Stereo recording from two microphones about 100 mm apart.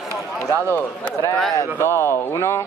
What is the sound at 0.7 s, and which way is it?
Speech, 20° left (ahead or behind).